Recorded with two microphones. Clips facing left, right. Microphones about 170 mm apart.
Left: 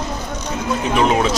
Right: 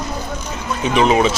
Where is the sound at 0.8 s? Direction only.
Centre (ahead or behind).